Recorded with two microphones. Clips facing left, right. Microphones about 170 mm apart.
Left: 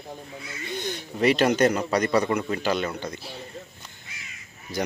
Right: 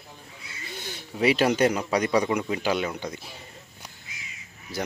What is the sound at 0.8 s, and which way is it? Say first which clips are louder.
A man's voice: left 2 dB; 5° right (ahead or behind).